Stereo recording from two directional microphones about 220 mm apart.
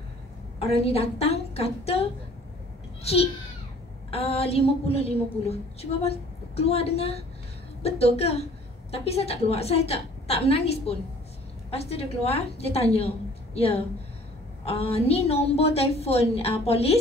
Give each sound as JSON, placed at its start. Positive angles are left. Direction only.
{"t": 0.6, "sound": "a woman's voice", "side_deg": 25}